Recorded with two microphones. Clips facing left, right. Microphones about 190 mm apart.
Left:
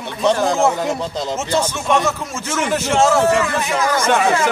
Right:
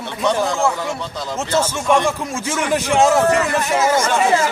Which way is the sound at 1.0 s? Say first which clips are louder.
Left 4 dB; 30° left (ahead or behind).